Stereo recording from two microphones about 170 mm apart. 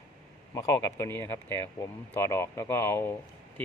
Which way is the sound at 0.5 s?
15° left (ahead or behind).